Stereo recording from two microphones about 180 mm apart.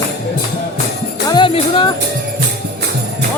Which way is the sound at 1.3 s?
25° left (ahead or behind).